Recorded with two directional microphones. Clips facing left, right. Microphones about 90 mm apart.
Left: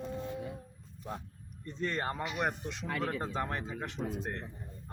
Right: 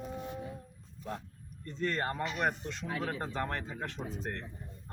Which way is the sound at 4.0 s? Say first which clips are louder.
Left 4 dB; 65° left (ahead or behind).